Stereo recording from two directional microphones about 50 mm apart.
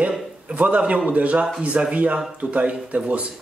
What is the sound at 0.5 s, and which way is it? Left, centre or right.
Speech, right.